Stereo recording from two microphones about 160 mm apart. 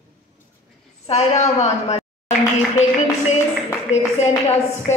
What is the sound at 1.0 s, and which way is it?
A woman's voice, 40° left (ahead or behind).